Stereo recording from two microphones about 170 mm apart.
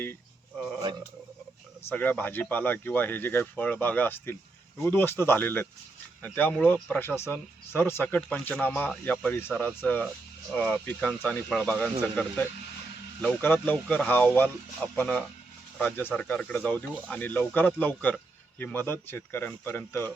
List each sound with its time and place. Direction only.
1.9 s speech: 10° left (ahead or behind)